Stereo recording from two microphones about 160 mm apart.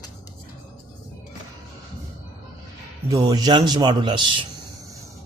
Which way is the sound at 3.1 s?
25° right (ahead or behind).